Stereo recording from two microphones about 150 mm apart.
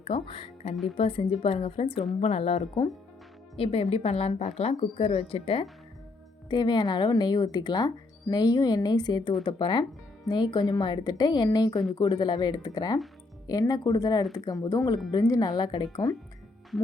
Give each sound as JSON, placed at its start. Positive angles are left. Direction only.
{"t": 0.0, "sound": "a woman's voice", "side_deg": 40}
{"t": 6.5, "sound": "speech", "side_deg": 30}